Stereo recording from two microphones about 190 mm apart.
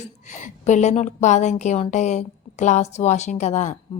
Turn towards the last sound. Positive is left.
turn(degrees=40)  # may be behind; listen again after turning